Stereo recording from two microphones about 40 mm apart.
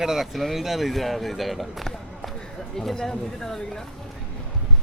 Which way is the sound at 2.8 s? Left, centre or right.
Centre.